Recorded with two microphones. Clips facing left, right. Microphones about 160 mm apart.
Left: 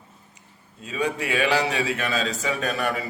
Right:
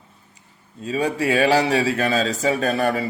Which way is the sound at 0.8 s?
35° right (ahead or behind).